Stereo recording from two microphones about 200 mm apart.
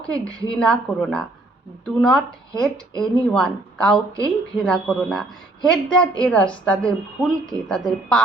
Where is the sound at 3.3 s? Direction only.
5° left (ahead or behind).